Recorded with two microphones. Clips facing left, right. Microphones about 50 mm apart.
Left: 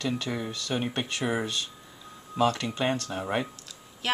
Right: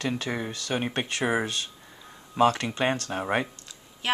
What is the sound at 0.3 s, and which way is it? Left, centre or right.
Speech, right.